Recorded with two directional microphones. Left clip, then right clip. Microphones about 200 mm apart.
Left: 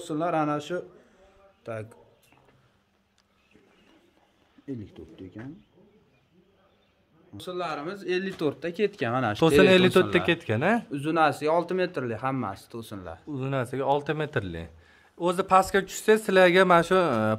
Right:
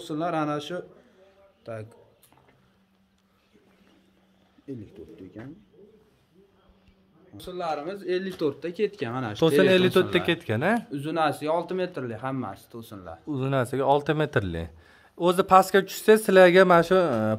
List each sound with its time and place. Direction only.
0.0 s speech: 20° left (ahead or behind)
1.6 s a man's voice: 45° left (ahead or behind)
7.3 s speech: 55° left (ahead or behind)
9.6 s speech: 15° left (ahead or behind)
10.9 s speech: 40° left (ahead or behind)
13.3 s a man's voice: 20° right (ahead or behind); by 17.4 s 5° right (ahead or behind)